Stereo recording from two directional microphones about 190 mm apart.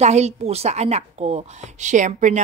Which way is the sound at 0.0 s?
35° right (ahead or behind).